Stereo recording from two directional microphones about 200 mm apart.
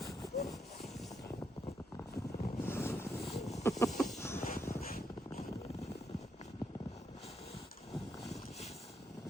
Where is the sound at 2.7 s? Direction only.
10° left (ahead or behind).